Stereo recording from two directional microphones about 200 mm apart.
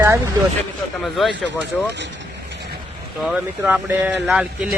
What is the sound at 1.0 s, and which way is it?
Speech, centre (ahead or behind).